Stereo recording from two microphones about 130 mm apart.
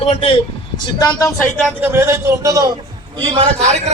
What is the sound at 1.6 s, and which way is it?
A man's voice, 15° right (ahead or behind).